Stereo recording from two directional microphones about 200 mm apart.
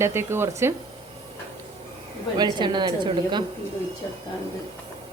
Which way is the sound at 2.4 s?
20° right (ahead or behind).